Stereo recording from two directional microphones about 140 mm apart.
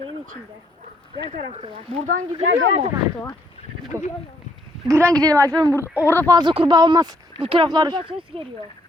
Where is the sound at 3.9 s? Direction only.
20° right (ahead or behind).